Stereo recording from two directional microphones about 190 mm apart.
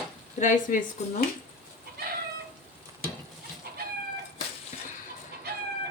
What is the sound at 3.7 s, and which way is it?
Cat, 55° right (ahead or behind).